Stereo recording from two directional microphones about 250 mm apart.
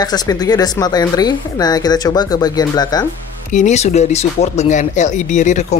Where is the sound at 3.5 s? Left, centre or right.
Left.